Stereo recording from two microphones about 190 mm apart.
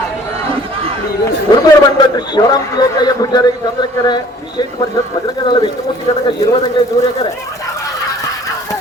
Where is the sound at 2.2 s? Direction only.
20° left (ahead or behind).